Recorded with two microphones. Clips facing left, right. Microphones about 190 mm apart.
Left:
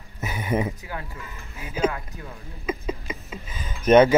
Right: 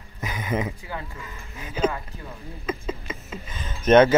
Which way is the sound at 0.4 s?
10° left (ahead or behind).